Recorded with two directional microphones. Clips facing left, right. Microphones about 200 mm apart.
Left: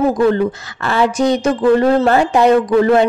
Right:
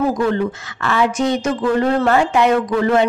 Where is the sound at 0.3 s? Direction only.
35° left (ahead or behind).